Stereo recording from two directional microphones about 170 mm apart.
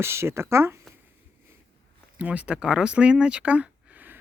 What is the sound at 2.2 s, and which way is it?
Speech, 10° right (ahead or behind).